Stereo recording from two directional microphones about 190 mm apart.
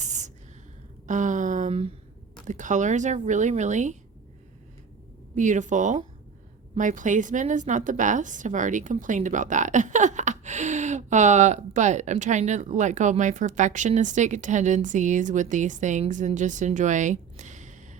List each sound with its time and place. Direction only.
0.0 s a sound: 40° right (ahead or behind)
2.5 s a woman's voice: 40° right (ahead or behind)
5.3 s a woman's voice: 40° right (ahead or behind)